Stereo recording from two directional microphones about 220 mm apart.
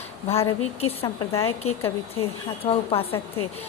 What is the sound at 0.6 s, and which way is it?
Speech, 25° left (ahead or behind).